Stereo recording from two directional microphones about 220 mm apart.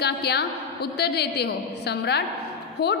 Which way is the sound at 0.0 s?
50° left (ahead or behind).